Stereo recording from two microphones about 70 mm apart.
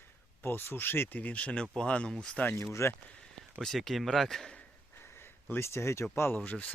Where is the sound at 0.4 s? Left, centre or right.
Left.